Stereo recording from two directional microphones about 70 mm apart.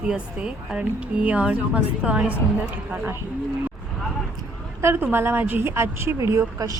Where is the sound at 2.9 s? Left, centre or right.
Right.